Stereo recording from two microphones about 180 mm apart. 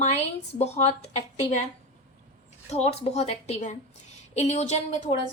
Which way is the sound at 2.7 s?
35° left (ahead or behind).